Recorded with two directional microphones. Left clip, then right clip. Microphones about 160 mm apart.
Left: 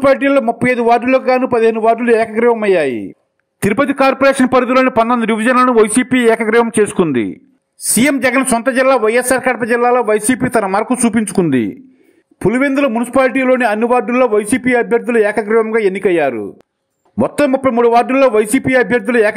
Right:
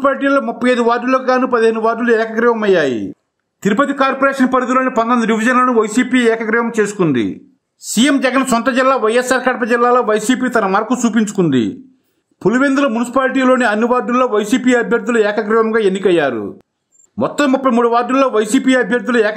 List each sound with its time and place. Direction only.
0.0 s a man's voice: 25° left (ahead or behind)
3.6 s a man's voice: 40° left (ahead or behind)
7.8 s a man's voice: 30° left (ahead or behind)